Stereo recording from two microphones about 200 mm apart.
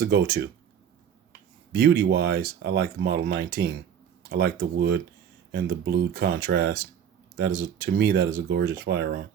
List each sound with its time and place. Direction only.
0.0 s speech: 50° right (ahead or behind)
1.7 s speech: 50° right (ahead or behind)